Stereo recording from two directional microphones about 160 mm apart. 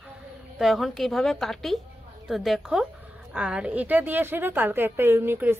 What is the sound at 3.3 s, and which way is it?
A woman's voice, 10° right (ahead or behind).